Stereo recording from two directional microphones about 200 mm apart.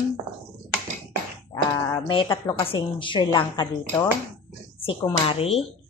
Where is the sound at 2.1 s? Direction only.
25° left (ahead or behind).